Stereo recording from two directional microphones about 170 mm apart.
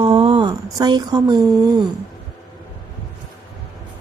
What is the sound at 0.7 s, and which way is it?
Mantra, 25° right (ahead or behind).